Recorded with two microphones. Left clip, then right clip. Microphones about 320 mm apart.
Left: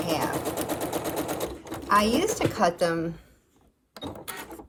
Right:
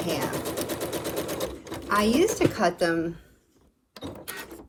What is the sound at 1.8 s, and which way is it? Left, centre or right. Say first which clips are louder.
Speech: even; centre.